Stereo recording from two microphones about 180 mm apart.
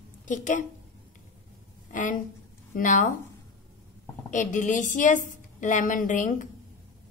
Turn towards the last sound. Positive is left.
turn(degrees=45)  # may be behind; listen again after turning